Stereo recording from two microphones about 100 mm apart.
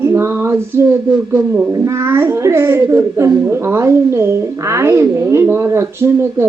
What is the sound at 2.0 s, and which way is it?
A woman's voice, 25° right (ahead or behind).